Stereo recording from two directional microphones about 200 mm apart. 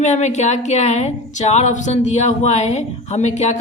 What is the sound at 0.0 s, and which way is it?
Speech, 35° left (ahead or behind).